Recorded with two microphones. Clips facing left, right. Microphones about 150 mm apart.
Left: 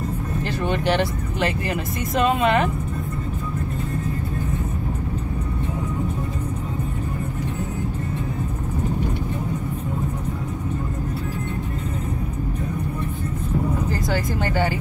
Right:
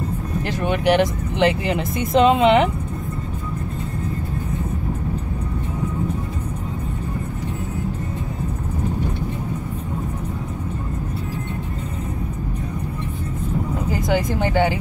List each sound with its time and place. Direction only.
0.5 s speech: 15° right (ahead or behind)
13.8 s speech: 15° right (ahead or behind)